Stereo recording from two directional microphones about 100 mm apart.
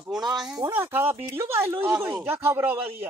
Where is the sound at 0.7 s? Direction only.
20° right (ahead or behind).